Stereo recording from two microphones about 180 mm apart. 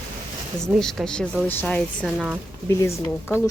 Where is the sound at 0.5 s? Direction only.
5° left (ahead or behind).